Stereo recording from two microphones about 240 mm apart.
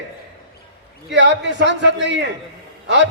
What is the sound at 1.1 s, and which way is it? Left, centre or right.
A man's voice, right.